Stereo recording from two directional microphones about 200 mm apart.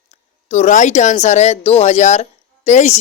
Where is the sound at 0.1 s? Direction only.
35° left (ahead or behind).